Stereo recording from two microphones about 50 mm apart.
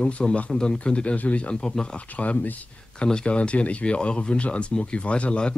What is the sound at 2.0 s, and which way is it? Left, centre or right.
Speech, left.